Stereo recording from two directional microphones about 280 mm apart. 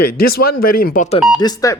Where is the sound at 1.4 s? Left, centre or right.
Centre.